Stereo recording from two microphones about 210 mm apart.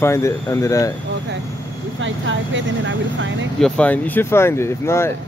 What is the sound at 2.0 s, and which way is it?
Speech, 65° right (ahead or behind).